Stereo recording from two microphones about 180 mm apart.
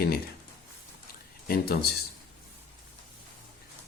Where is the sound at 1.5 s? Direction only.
60° left (ahead or behind).